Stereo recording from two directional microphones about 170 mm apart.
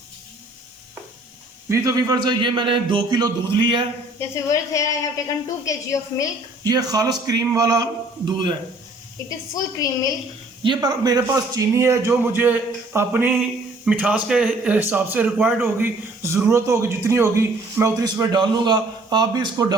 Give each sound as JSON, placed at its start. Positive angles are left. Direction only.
{"t": 1.7, "sound": "a man's voice", "side_deg": -20}
{"t": 4.2, "sound": "a woman's voice", "side_deg": 20}
{"t": 6.7, "sound": "a man's voice", "side_deg": -20}
{"t": 9.6, "sound": "a woman's voice", "side_deg": 20}
{"t": 10.6, "sound": "a man's voice", "side_deg": -25}